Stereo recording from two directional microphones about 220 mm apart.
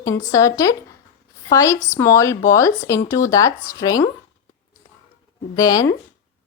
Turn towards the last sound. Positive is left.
turn(degrees=15)  # may be behind; listen again after turning